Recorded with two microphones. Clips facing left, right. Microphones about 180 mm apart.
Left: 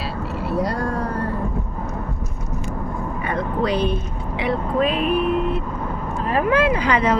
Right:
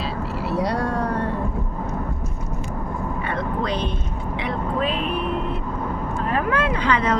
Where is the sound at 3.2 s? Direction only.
10° left (ahead or behind).